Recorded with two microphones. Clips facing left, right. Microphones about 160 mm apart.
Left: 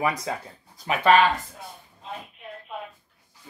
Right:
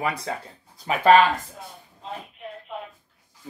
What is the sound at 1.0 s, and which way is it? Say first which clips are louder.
Speech: right 3 dB; 40° right (ahead or behind).